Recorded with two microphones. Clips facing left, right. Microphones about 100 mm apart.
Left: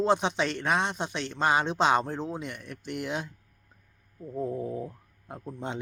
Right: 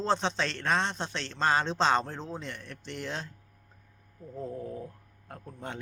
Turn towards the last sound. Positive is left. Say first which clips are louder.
# left 5 dB
turn(degrees=20)  # may be behind; listen again after turning